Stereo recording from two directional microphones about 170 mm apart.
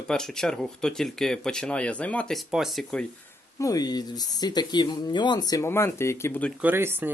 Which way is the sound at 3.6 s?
20° left (ahead or behind).